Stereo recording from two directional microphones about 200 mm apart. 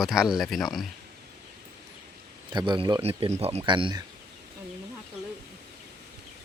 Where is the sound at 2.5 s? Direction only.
25° right (ahead or behind).